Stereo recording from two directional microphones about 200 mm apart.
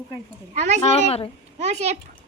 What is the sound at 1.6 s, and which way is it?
Speech, 35° right (ahead or behind).